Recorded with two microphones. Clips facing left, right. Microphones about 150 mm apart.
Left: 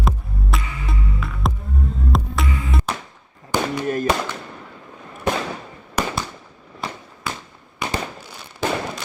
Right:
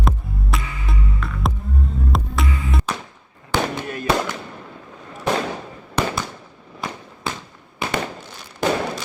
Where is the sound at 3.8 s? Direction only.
40° left (ahead or behind).